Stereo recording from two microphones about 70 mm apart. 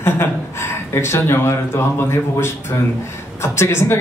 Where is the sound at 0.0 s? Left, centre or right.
Left.